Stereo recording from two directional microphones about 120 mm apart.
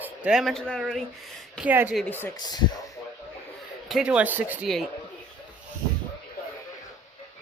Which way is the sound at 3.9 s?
5° right (ahead or behind).